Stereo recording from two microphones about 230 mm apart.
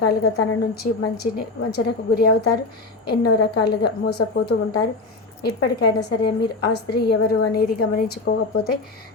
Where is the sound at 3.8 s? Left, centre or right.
Left.